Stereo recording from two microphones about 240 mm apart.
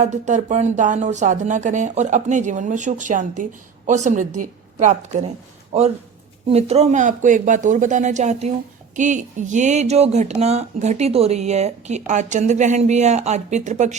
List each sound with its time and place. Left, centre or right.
0.0 s speech: right